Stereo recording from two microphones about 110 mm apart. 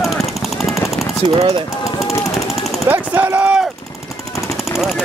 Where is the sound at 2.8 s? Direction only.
15° right (ahead or behind).